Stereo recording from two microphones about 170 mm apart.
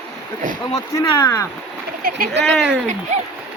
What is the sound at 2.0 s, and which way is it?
Speech, 55° right (ahead or behind).